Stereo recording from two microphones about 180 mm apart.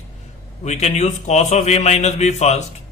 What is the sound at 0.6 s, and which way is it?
A man's voice, 40° left (ahead or behind).